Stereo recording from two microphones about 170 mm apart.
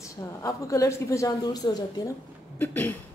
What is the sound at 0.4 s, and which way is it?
A woman's voice, 20° left (ahead or behind).